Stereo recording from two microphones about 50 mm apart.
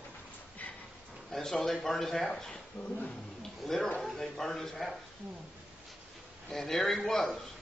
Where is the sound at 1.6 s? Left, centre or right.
Centre.